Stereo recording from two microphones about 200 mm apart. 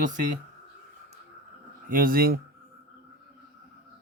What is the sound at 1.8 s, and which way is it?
Speech, 45° right (ahead or behind).